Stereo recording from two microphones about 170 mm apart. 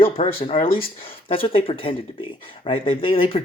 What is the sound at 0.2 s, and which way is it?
Speech, 35° left (ahead or behind).